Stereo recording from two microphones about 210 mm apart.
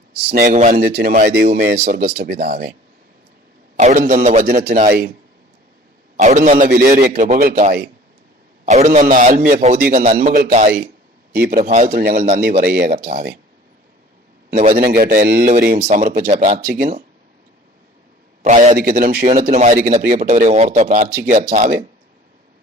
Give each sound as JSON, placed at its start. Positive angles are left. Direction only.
{"t": 0.1, "sound": "speech", "side_deg": -50}
{"t": 0.4, "sound": "a man's voice", "side_deg": -35}
{"t": 3.8, "sound": "speech", "side_deg": -35}
{"t": 6.1, "sound": "a man's voice", "side_deg": -35}
{"t": 14.5, "sound": "a man's voice", "side_deg": -40}
{"t": 18.4, "sound": "speech", "side_deg": -35}